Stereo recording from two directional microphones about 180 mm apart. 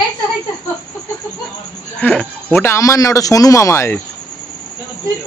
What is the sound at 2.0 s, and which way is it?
A man's voice, 5° left (ahead or behind).